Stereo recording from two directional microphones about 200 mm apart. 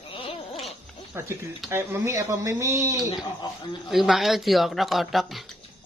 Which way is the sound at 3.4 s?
20° left (ahead or behind).